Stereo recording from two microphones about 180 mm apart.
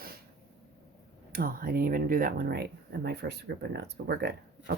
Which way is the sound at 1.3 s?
55° right (ahead or behind).